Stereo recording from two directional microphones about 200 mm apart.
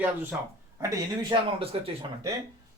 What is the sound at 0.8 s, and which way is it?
Speech, 20° right (ahead or behind).